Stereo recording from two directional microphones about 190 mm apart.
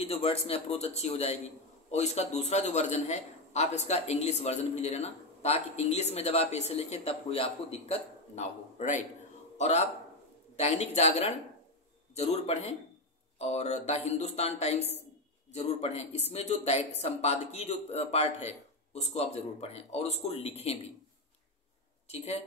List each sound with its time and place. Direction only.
0.1 s a man's voice: 30° left (ahead or behind)
22.0 s speech: 35° left (ahead or behind)